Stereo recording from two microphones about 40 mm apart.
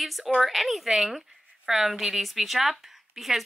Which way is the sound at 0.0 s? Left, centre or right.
Centre.